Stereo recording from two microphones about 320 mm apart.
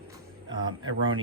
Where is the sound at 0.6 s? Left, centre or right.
Right.